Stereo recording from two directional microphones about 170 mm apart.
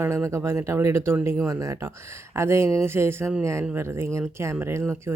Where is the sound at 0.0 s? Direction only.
15° right (ahead or behind).